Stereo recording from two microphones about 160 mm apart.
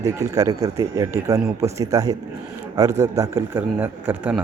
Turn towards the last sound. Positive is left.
turn(degrees=-10)  # may be behind; listen again after turning